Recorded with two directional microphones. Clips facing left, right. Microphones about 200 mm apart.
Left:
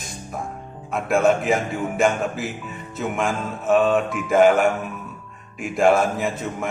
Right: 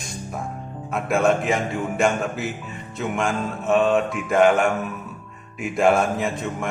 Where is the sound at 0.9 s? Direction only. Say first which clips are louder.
Left 1 dB; centre (ahead or behind).